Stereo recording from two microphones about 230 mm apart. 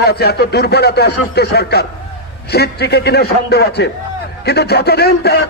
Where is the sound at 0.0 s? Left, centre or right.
Left.